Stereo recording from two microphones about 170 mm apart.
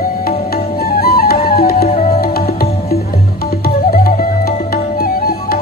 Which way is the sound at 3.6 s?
60° left (ahead or behind).